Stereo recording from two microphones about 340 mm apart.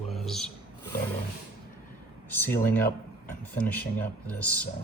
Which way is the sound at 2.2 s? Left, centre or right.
Centre.